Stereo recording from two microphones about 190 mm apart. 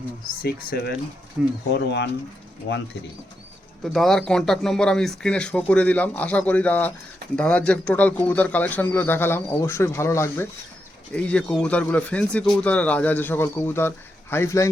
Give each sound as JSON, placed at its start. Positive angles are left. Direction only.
{"t": 0.4, "sound": "speech", "side_deg": 55}
{"t": 1.4, "sound": "speech", "side_deg": -5}
{"t": 1.7, "sound": "speech", "side_deg": 65}
{"t": 3.8, "sound": "speech", "side_deg": 0}